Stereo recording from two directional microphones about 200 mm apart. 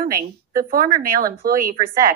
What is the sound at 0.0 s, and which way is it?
A woman's voice, 45° right (ahead or behind).